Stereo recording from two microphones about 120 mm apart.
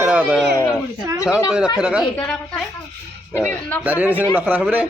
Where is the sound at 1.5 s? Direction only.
5° right (ahead or behind).